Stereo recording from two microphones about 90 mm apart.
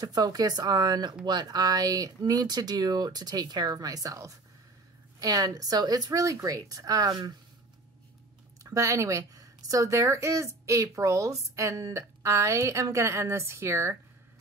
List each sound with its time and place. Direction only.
0.0 s speech: 45° right (ahead or behind)
8.6 s a woman's voice: 35° right (ahead or behind)